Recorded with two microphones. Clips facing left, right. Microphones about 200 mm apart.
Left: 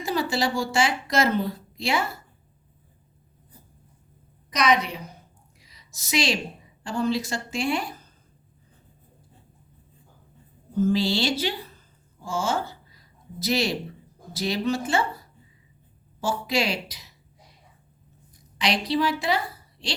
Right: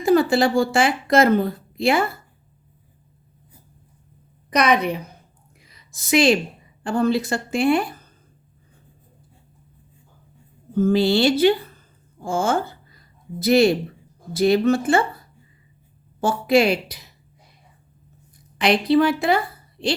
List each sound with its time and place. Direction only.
0.0 s a woman's voice: 55° right (ahead or behind)
4.5 s a woman's voice: 55° right (ahead or behind)
5.5 s a sound: 55° right (ahead or behind)
6.8 s a woman's voice: 55° right (ahead or behind)
10.8 s a woman's voice: 55° right (ahead or behind)
16.2 s a woman's voice: 55° right (ahead or behind)
18.6 s a woman's voice: 55° right (ahead or behind)